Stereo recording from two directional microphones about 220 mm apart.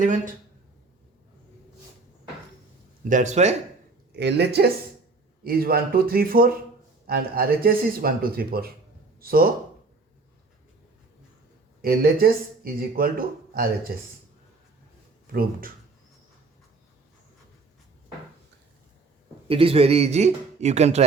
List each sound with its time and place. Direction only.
3.0 s speech: 35° right (ahead or behind)
4.1 s speech: 50° right (ahead or behind)
11.8 s speech: 45° right (ahead or behind)
15.3 s speech: 40° right (ahead or behind)
19.5 s speech: 25° right (ahead or behind)